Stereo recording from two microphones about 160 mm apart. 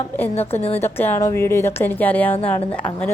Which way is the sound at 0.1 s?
15° left (ahead or behind).